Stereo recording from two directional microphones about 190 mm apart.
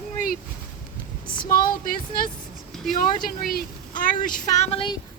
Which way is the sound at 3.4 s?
45° left (ahead or behind).